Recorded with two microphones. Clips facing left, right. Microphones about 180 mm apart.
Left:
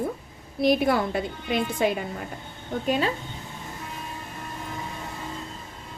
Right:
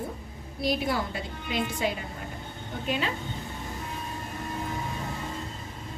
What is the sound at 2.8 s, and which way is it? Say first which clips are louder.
Speech: left 5 dB; 40° left (ahead or behind).